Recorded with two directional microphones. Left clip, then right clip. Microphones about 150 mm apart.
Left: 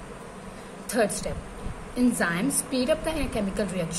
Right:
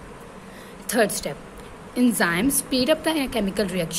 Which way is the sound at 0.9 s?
60° right (ahead or behind).